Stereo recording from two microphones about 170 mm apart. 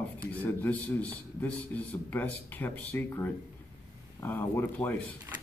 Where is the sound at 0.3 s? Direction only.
10° left (ahead or behind).